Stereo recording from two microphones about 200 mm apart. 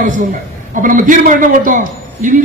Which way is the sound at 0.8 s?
40° right (ahead or behind).